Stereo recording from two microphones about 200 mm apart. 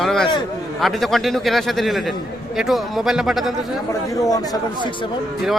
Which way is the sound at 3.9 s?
15° left (ahead or behind).